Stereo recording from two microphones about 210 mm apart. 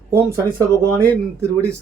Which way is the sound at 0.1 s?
15° right (ahead or behind).